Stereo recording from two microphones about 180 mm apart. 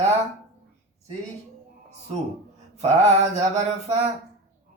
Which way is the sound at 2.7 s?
40° right (ahead or behind).